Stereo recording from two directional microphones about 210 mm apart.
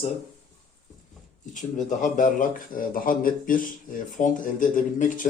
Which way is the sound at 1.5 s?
35° left (ahead or behind).